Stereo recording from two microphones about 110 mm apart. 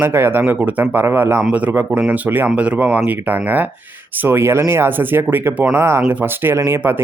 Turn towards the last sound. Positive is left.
turn(degrees=-20)  # may be behind; listen again after turning